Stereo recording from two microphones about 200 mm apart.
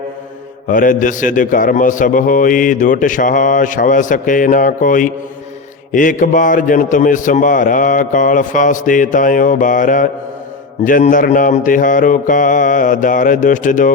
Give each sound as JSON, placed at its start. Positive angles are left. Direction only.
{"t": 0.7, "sound": "a man's voice", "side_deg": 40}